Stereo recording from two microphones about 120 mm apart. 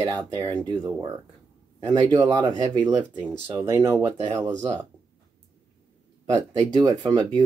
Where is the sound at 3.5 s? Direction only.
20° right (ahead or behind).